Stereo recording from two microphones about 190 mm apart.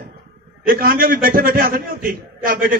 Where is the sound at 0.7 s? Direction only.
50° right (ahead or behind).